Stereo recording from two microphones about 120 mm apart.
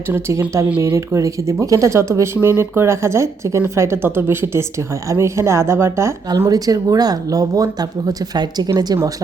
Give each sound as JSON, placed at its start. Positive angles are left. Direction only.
{"t": 0.1, "sound": "speech", "side_deg": -25}